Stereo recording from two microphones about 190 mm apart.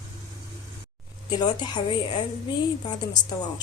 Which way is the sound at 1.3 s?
20° left (ahead or behind).